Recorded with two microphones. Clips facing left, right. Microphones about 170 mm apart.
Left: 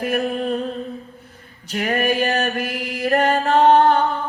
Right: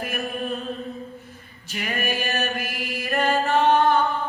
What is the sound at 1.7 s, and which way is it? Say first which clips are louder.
Music: left 7 dB; 50° left (ahead or behind).